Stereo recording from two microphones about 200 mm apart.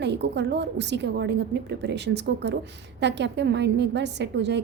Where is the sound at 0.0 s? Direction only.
60° right (ahead or behind).